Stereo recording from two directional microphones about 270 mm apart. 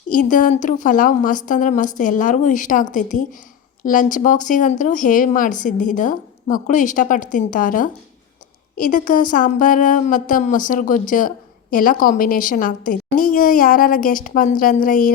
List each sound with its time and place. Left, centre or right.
0.1 s speech: left